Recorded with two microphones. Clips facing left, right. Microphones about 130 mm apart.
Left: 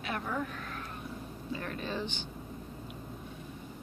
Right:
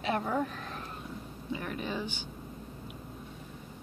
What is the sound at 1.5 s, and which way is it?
Speech, 15° right (ahead or behind).